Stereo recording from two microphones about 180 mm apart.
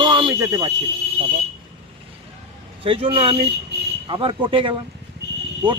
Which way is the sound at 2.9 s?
30° right (ahead or behind).